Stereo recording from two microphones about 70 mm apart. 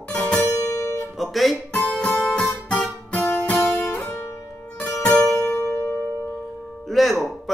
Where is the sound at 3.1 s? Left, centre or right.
Left.